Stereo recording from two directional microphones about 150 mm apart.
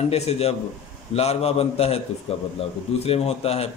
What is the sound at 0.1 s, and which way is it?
A man's voice, 45° left (ahead or behind).